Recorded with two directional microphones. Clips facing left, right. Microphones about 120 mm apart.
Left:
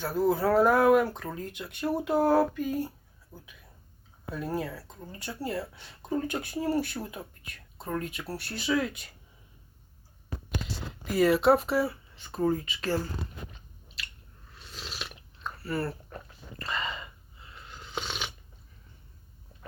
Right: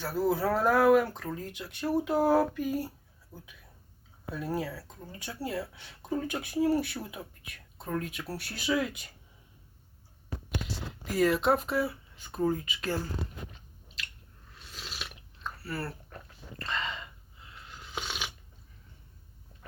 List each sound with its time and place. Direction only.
0.0 s speech: centre (ahead or behind)
2.1 s a sound: 10° right (ahead or behind)
2.6 s speech: 5° right (ahead or behind)
10.7 s speech: centre (ahead or behind)
14.6 s chewing: centre (ahead or behind)
16.0 s a sound: 10° left (ahead or behind); by 18.3 s 5° right (ahead or behind)